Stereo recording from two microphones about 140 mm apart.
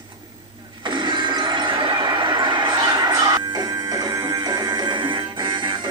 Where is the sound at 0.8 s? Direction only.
35° right (ahead or behind).